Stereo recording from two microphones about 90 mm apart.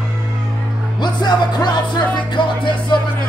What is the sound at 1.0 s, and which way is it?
Music, 55° left (ahead or behind).